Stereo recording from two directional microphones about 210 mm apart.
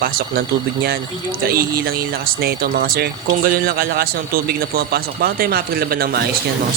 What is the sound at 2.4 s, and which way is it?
Speech, 45° right (ahead or behind).